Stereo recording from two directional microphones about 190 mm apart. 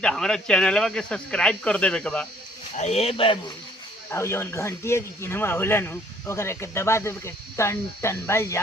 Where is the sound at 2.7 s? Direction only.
35° left (ahead or behind).